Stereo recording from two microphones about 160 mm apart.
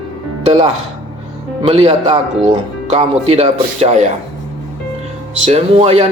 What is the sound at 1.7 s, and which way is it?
Speech, 35° right (ahead or behind).